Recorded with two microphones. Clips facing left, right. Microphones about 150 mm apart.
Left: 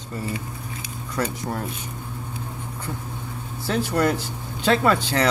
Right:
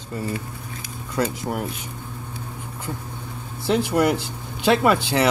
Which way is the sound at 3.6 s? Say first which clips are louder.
Right 3 dB; 20° right (ahead or behind).